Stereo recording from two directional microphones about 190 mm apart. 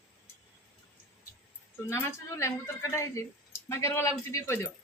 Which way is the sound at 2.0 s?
15° left (ahead or behind).